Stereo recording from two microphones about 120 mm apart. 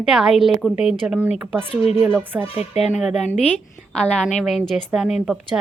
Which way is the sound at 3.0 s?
Centre (ahead or behind).